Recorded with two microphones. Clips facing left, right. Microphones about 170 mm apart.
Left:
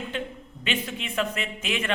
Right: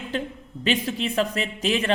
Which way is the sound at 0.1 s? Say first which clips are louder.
Right 5 dB; 40° right (ahead or behind).